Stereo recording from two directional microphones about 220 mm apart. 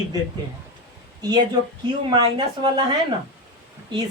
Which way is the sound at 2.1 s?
20° right (ahead or behind).